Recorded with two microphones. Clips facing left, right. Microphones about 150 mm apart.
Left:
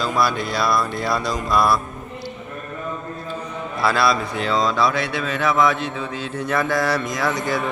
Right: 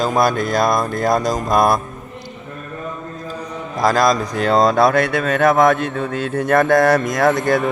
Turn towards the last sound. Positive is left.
turn(degrees=-55)  # may be behind; listen again after turning